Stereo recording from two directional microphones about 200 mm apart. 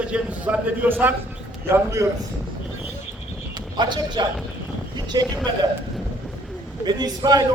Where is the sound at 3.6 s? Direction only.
20° right (ahead or behind).